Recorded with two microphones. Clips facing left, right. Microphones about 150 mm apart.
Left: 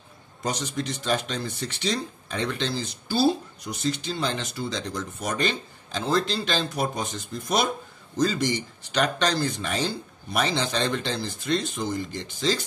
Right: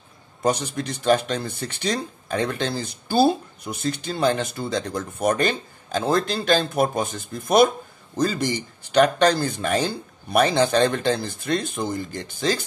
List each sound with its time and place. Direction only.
0.4 s speech: 55° right (ahead or behind)